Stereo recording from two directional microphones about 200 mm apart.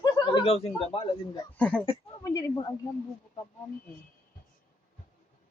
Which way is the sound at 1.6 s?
5° left (ahead or behind).